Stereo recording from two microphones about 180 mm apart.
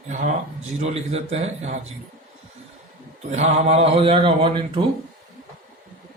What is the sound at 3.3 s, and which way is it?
Speech, 40° right (ahead or behind).